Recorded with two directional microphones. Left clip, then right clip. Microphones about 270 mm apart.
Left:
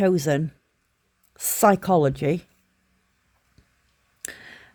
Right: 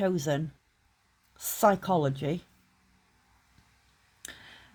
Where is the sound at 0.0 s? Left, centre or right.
Left.